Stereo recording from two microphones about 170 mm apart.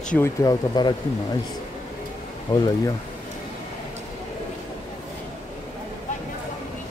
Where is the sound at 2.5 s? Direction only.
30° left (ahead or behind).